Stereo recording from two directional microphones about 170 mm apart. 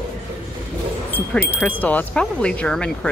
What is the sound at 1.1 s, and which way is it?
Speech, 10° left (ahead or behind).